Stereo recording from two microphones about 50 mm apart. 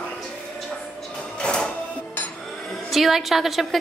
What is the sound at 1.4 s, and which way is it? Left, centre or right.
Music, centre.